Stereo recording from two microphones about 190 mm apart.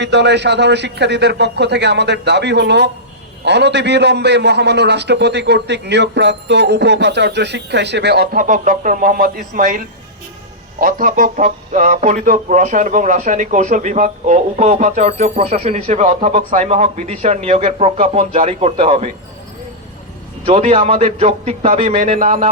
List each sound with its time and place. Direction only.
0.0 s a man's voice: 65° right (ahead or behind); by 19.0 s 35° right (ahead or behind)
20.4 s speech: 30° right (ahead or behind)